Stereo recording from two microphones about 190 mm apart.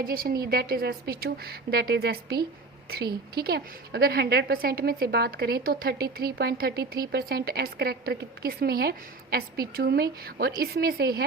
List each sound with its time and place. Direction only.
0.0 s a woman's voice: 50° right (ahead or behind)
3.3 s a woman's voice: 55° right (ahead or behind)